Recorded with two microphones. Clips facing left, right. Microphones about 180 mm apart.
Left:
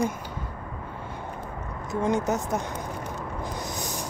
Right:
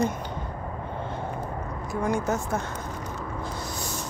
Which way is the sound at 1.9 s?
20° left (ahead or behind).